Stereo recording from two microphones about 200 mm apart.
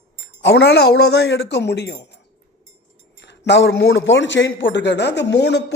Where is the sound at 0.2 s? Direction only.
55° left (ahead or behind).